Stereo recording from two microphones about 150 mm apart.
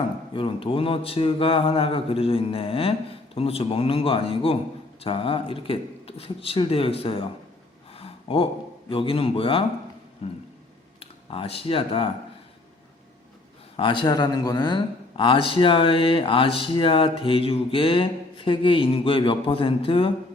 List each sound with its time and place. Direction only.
0.3 s a man's voice: 35° left (ahead or behind)
7.9 s a sound: 40° left (ahead or behind)
8.9 s a man's voice: 35° left (ahead or behind)
13.7 s a man's voice: 35° left (ahead or behind)